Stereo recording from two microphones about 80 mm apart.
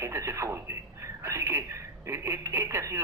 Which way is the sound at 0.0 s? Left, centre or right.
Right.